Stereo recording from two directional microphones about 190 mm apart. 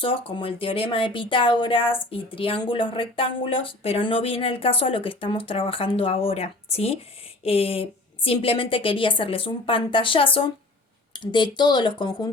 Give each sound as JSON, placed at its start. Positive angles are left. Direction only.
{"t": 0.0, "sound": "speech", "side_deg": 30}